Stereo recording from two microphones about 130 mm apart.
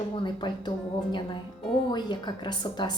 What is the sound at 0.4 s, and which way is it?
Speech, 35° left (ahead or behind).